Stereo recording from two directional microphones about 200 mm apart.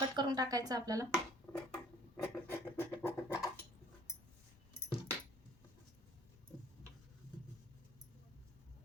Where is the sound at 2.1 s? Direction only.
10° left (ahead or behind).